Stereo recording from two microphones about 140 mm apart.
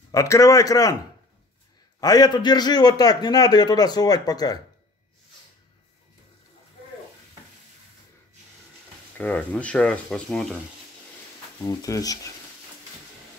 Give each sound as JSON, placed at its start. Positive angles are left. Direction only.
{"t": 0.1, "sound": "a man's voice", "side_deg": 25}
{"t": 2.0, "sound": "a man's voice", "side_deg": 25}
{"t": 9.2, "sound": "speech", "side_deg": 10}
{"t": 11.6, "sound": "a man's voice", "side_deg": 25}